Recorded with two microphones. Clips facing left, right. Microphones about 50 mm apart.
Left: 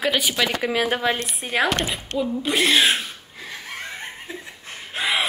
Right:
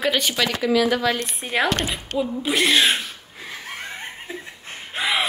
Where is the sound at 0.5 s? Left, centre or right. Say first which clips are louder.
Right 3 dB; left.